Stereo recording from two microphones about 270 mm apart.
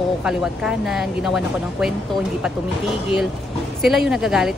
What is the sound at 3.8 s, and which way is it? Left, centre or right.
Speech, centre.